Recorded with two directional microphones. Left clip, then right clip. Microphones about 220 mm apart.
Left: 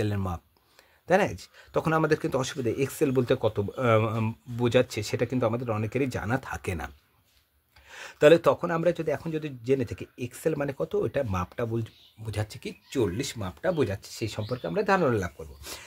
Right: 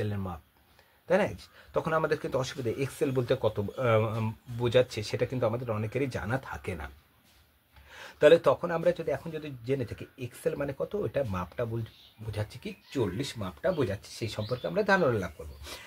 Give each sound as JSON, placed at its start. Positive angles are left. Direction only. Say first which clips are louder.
{"t": 0.0, "sound": "speech", "louder": "left 5 dB", "side_deg": 50}
{"t": 7.9, "sound": "speech", "louder": "left 2 dB", "side_deg": 45}